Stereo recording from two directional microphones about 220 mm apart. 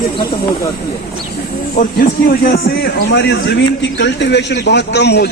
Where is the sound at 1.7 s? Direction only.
40° left (ahead or behind).